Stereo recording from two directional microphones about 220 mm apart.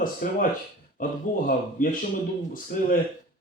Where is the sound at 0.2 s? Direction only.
40° left (ahead or behind).